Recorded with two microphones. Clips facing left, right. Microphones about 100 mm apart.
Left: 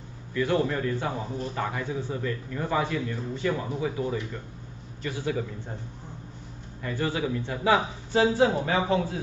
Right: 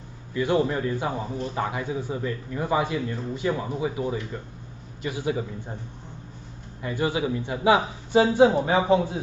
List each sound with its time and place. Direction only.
0.3 s a man's voice: 15° right (ahead or behind)
6.8 s a man's voice: 15° right (ahead or behind)